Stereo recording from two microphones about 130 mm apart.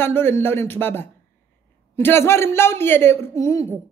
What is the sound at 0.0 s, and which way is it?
A woman's voice, 15° left (ahead or behind).